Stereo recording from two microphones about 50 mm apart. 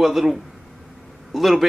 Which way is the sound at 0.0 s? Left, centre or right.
Centre.